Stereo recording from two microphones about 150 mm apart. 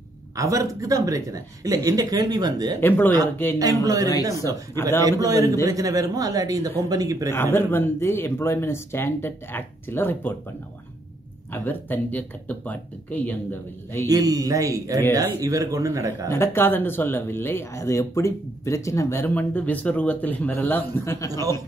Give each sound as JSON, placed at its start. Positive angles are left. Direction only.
{"t": 0.4, "sound": "speech", "side_deg": -20}
{"t": 3.8, "sound": "speech", "side_deg": -25}
{"t": 7.3, "sound": "speech", "side_deg": 15}
{"t": 11.5, "sound": "speech", "side_deg": 15}
{"t": 14.0, "sound": "speech", "side_deg": -25}
{"t": 16.3, "sound": "speech", "side_deg": 15}